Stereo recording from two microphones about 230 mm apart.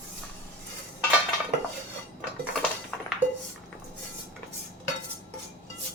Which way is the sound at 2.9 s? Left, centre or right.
Centre.